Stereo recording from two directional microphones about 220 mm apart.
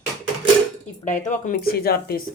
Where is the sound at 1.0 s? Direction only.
35° left (ahead or behind).